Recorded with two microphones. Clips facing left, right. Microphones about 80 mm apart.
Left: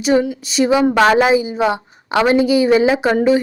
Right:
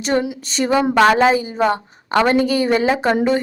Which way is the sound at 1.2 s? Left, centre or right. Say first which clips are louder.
Left 1 dB; centre.